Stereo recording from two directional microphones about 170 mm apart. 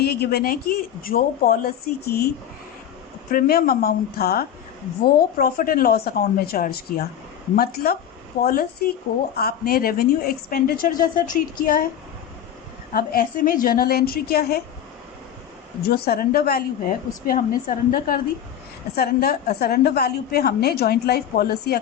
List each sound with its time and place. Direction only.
0.0 s a woman's voice: 70° left (ahead or behind)
12.9 s a woman's voice: 60° left (ahead or behind)
15.8 s a woman's voice: 65° left (ahead or behind)
18.9 s a woman's voice: 65° left (ahead or behind)